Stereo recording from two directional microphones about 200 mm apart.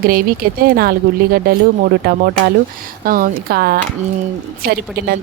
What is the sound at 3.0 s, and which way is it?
Speech, 45° right (ahead or behind).